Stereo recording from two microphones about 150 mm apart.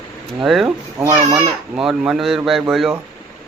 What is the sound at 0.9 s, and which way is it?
Speech, 20° right (ahead or behind).